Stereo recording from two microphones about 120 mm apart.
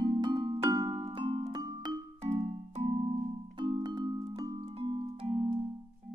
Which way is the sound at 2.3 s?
65° right (ahead or behind).